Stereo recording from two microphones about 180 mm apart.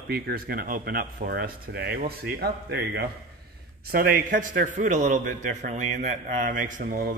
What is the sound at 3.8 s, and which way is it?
A man's voice, 55° right (ahead or behind).